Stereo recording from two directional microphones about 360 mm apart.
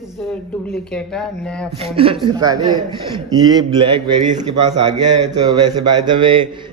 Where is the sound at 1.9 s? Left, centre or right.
Centre.